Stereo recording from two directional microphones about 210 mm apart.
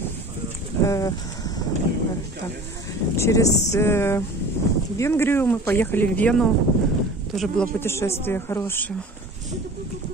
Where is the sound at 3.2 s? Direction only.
15° left (ahead or behind).